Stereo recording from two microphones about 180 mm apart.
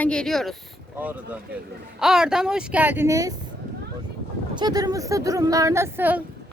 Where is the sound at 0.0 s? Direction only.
5° left (ahead or behind).